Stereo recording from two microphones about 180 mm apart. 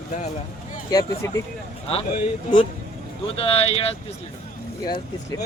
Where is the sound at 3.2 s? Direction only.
30° left (ahead or behind).